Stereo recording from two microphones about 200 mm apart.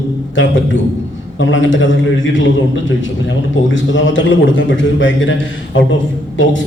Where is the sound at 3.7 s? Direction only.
70° left (ahead or behind).